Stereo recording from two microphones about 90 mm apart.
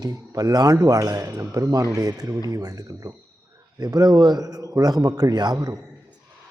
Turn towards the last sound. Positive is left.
turn(degrees=-50)  # may be behind; listen again after turning